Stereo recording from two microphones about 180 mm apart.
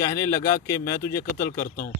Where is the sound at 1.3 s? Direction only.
50° left (ahead or behind).